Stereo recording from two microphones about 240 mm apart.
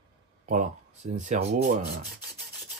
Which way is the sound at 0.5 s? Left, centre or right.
Right.